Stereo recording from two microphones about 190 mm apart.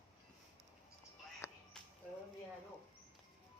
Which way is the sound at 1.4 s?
15° left (ahead or behind).